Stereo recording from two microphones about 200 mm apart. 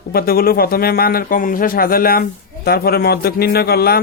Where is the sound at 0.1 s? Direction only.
50° left (ahead or behind).